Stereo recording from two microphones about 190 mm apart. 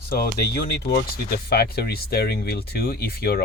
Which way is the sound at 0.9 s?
60° left (ahead or behind).